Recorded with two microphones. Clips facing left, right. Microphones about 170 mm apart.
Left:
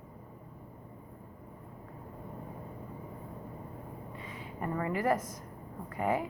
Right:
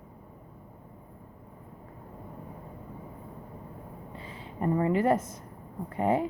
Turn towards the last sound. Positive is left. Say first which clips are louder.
# right 5 dB
turn(degrees=-25)  # may be behind; listen again after turning